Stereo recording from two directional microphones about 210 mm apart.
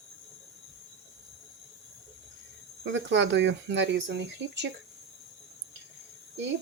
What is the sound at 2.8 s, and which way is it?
Speech, 60° right (ahead or behind).